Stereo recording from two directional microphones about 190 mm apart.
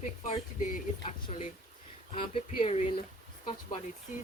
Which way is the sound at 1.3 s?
35° left (ahead or behind).